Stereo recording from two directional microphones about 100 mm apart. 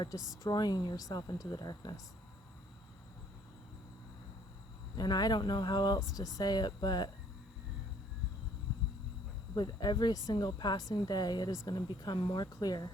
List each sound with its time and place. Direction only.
0.4 s speech: 45° left (ahead or behind)
4.9 s speech: 45° left (ahead or behind)
9.6 s speech: 45° left (ahead or behind)